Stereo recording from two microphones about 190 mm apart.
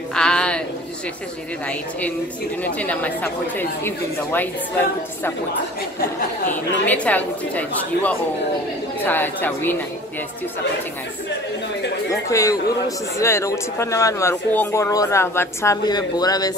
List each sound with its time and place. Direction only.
0.1 s a sound: 5° left (ahead or behind)
1.7 s a man's voice: 10° left (ahead or behind)
6.5 s a man's voice: 10° left (ahead or behind)
12.1 s a man's voice: 15° left (ahead or behind)